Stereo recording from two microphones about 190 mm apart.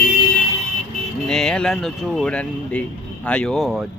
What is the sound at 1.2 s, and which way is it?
Speech, centre (ahead or behind).